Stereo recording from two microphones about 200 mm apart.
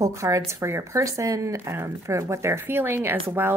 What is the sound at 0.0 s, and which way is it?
Speech, 15° right (ahead or behind).